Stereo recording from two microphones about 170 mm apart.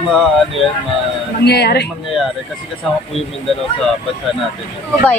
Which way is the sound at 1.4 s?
70° left (ahead or behind).